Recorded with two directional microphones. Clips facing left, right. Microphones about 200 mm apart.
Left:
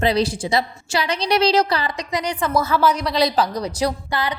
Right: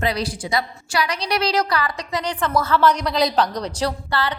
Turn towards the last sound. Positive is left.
turn(degrees=15)  # may be behind; listen again after turning